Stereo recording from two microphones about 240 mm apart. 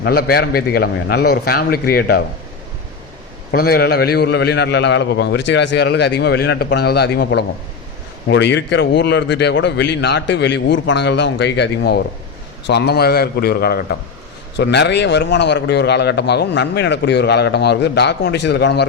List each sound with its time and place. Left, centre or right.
0.0 s a man's voice: left
3.5 s a man's voice: left